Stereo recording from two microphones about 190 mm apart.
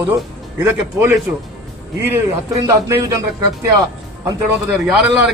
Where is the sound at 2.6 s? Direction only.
20° right (ahead or behind).